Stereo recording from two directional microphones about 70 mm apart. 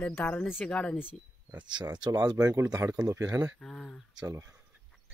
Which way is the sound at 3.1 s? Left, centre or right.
Right.